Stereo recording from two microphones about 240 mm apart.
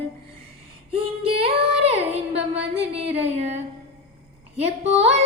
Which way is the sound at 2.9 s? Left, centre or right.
Right.